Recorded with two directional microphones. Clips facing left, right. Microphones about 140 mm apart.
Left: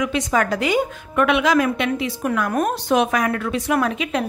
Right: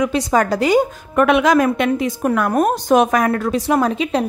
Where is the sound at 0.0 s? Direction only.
35° right (ahead or behind).